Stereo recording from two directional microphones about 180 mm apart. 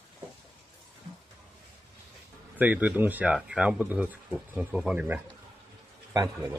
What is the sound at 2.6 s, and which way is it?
Speech, 10° right (ahead or behind).